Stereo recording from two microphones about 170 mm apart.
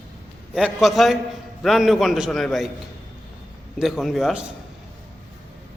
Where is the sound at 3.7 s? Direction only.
Centre (ahead or behind).